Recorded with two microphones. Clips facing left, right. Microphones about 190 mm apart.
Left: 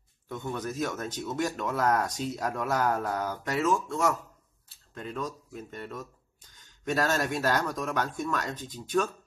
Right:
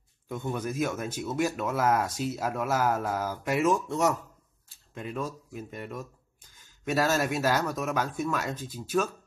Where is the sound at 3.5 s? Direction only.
15° right (ahead or behind).